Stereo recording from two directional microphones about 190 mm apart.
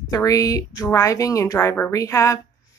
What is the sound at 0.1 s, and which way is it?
Speech, 15° left (ahead or behind).